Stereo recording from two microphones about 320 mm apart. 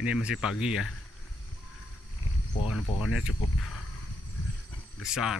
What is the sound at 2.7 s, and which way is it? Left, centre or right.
Speech, left.